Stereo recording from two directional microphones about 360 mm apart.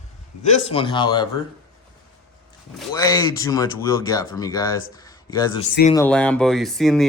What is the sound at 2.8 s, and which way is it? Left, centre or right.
Speech, centre.